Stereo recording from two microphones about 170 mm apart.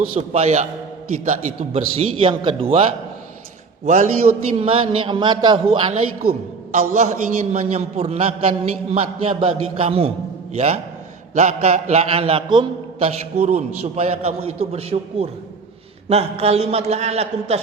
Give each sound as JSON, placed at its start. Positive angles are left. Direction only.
{"t": 0.2, "sound": "a man's voice", "side_deg": -40}
{"t": 3.8, "sound": "a man's voice", "side_deg": -45}